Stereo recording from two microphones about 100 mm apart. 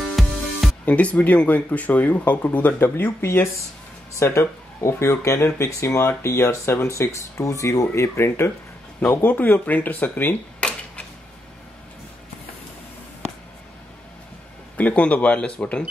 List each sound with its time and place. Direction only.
0.0 s music: centre (ahead or behind)
0.8 s speech: 15° left (ahead or behind)
14.8 s speech: 15° left (ahead or behind)